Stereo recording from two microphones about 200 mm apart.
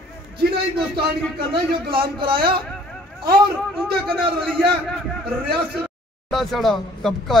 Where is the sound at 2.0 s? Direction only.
25° right (ahead or behind).